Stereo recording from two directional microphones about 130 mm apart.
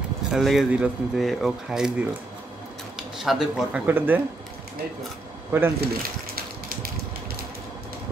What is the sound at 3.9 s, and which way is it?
Speech, 15° right (ahead or behind).